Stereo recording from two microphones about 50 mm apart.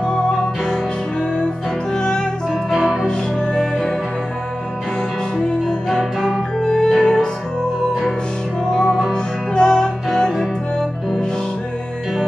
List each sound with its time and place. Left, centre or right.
0.0 s music: centre
2.0 s music: centre
2.7 s music: centre
3.1 s music: centre
5.7 s music: centre
8.8 s music: centre
9.1 s music: centre